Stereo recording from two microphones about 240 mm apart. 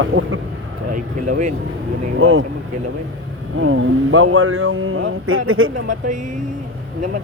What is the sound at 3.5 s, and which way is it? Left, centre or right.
Speech, right.